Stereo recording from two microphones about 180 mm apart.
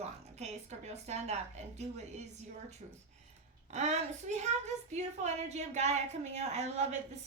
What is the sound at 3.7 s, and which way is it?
A woman's voice, 40° right (ahead or behind).